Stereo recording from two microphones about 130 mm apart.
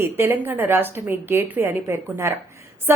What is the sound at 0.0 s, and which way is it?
A woman's voice, 15° right (ahead or behind).